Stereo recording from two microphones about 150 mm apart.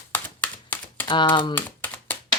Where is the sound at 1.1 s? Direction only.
30° left (ahead or behind).